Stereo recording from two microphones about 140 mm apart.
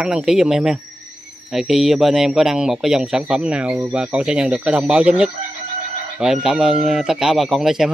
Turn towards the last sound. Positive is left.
turn(degrees=0)  # may be behind; listen again after turning